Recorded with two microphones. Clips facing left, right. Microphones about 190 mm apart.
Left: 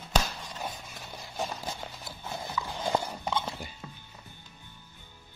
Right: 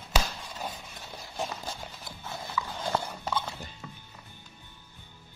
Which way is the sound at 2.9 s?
20° left (ahead or behind).